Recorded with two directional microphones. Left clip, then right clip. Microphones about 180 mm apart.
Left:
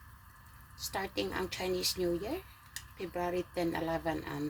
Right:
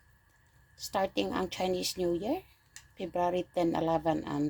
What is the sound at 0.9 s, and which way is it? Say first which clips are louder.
Speech: right 5 dB; 50° right (ahead or behind).